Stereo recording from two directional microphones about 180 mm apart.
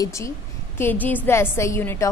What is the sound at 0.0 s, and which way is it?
A woman's voice, 15° left (ahead or behind).